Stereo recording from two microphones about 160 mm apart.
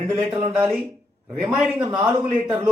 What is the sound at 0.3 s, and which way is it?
Speech, 10° right (ahead or behind).